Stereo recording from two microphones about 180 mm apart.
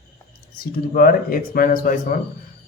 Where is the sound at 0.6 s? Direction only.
55° left (ahead or behind).